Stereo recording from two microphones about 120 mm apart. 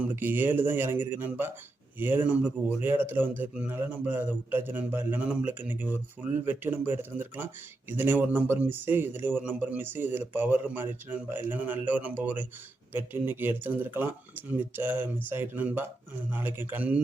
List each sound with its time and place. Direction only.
0.1 s speech: 15° right (ahead or behind)